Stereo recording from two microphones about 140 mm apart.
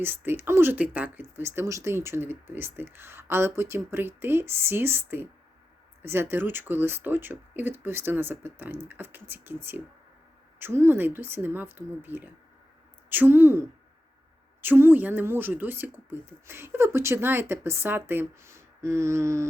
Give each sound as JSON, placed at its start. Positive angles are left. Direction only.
{"t": 0.0, "sound": "speech", "side_deg": -15}